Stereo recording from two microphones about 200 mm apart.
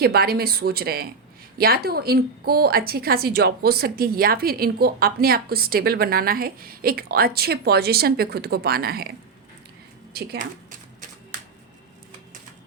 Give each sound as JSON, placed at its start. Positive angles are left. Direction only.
{"t": 0.0, "sound": "a woman's voice", "side_deg": -50}